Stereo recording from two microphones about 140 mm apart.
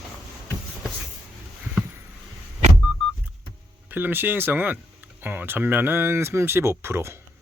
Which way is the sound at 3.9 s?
15° right (ahead or behind).